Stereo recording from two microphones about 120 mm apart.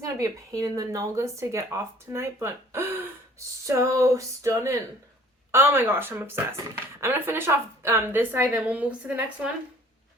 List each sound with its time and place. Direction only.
0.0 s a woman's voice: 30° right (ahead or behind); by 9.5 s 10° right (ahead or behind)